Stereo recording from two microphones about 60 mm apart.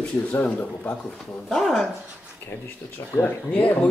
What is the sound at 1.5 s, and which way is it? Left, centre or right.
Speech, centre.